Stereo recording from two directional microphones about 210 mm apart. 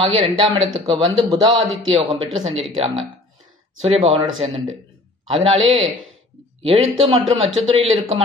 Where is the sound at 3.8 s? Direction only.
30° right (ahead or behind).